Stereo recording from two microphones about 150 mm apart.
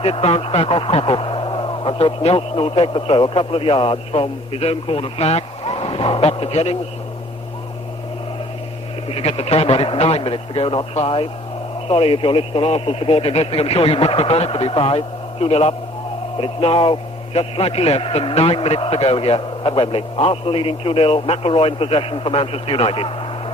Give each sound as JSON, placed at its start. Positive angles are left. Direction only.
{"t": 0.0, "sound": "speech", "side_deg": 40}
{"t": 9.0, "sound": "speech", "side_deg": 40}